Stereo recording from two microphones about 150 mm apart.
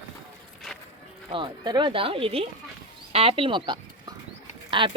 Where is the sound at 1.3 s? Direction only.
35° right (ahead or behind).